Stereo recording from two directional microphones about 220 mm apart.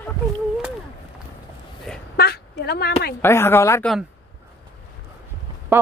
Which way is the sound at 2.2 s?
45° left (ahead or behind).